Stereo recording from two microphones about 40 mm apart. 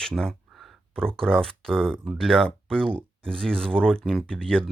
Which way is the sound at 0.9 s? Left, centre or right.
Centre.